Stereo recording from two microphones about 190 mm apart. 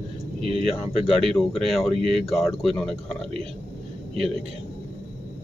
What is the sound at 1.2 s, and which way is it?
Speech, centre (ahead or behind).